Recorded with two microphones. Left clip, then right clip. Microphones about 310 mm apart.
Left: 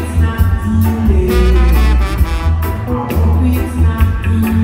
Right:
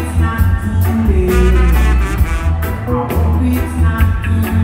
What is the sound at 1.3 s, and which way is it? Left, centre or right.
Music, left.